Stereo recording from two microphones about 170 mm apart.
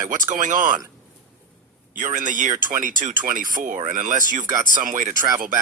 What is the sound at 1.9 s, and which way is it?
Speech, 50° right (ahead or behind).